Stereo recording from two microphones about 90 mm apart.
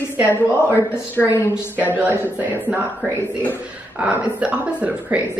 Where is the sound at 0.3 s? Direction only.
25° right (ahead or behind).